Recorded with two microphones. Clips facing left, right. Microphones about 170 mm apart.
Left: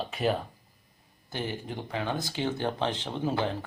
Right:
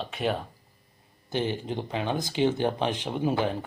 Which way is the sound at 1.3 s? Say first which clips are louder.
Right 6 dB; 20° right (ahead or behind).